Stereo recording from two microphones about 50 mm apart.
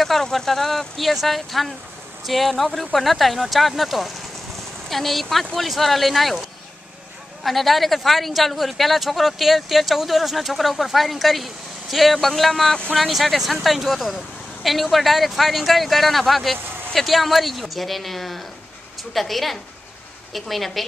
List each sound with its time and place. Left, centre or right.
0.0 s speech: centre
7.4 s speech: centre